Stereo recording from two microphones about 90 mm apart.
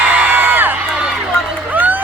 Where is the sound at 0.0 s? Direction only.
20° right (ahead or behind).